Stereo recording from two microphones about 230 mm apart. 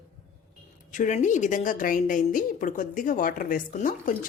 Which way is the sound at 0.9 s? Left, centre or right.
Left.